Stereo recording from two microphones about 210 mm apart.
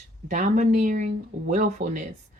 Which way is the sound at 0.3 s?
35° right (ahead or behind).